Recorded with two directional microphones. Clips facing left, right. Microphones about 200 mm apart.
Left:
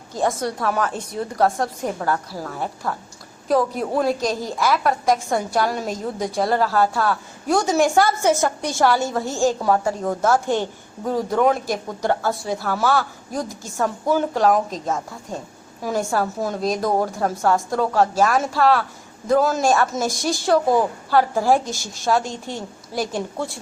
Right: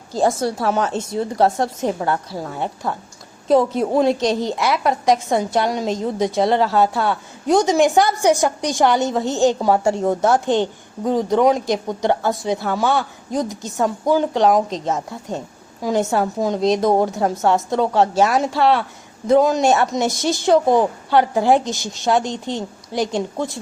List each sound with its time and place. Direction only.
0.1 s a woman's voice: 30° right (ahead or behind)